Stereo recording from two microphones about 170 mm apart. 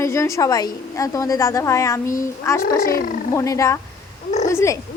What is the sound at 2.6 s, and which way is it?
Speech, 60° left (ahead or behind).